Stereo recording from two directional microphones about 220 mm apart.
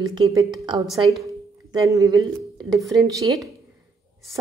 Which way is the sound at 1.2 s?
15° right (ahead or behind).